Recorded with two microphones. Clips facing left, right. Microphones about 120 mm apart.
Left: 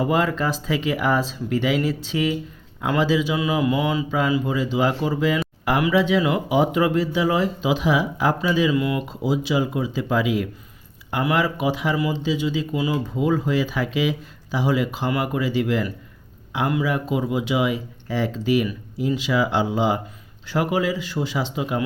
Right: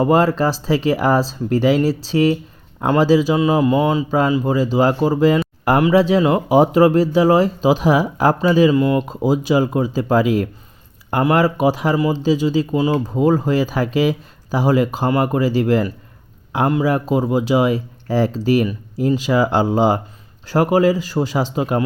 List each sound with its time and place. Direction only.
0.0 s speech: 40° right (ahead or behind)